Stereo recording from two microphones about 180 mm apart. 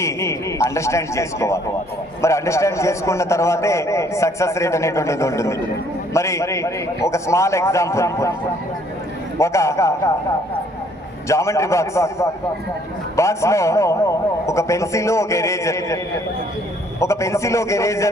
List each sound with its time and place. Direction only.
0.0 s a man's voice: 15° left (ahead or behind)
9.4 s a man's voice: 15° left (ahead or behind)
11.3 s a man's voice: 15° left (ahead or behind)
17.0 s a man's voice: 15° left (ahead or behind)